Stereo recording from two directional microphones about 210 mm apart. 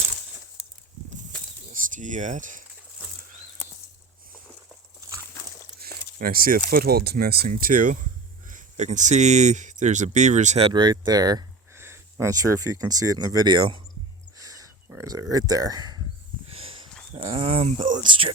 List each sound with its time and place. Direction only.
1.7 s speech: 40° right (ahead or behind)
4.9 s a sound: 15° right (ahead or behind)
5.8 s speech: 45° right (ahead or behind)
10.7 s speech: 20° right (ahead or behind)
14.3 s a sound: 15° right (ahead or behind)
17.2 s speech: 25° right (ahead or behind)